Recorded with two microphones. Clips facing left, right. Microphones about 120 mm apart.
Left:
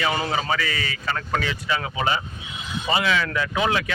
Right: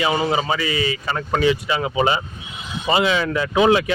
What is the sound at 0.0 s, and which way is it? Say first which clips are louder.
Speech: right 4 dB; 10° right (ahead or behind).